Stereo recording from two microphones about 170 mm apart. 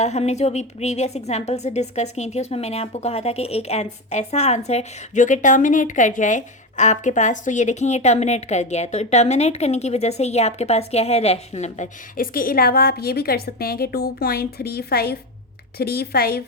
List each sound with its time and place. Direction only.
0.0 s a woman's voice: 40° left (ahead or behind); by 16.4 s 65° left (ahead or behind)